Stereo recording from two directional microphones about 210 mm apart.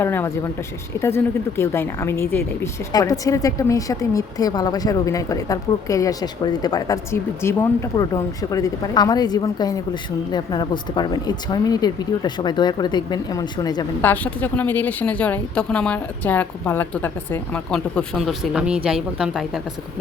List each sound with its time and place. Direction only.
0.0 s a woman's voice: 10° left (ahead or behind)
14.1 s a woman's voice: 5° left (ahead or behind)